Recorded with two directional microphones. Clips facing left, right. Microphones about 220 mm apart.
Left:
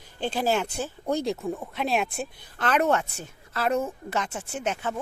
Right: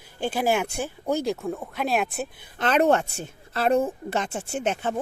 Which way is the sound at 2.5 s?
25° right (ahead or behind).